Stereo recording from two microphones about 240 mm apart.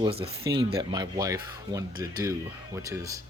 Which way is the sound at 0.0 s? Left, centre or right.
Right.